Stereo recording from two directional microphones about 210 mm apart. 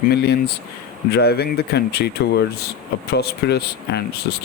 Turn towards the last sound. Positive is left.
turn(degrees=50)  # may be behind; listen again after turning